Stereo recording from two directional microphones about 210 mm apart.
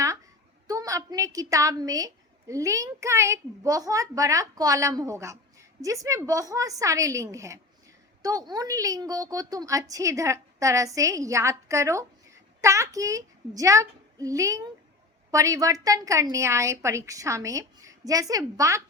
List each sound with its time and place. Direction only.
0.7 s a woman's voice: 15° right (ahead or behind)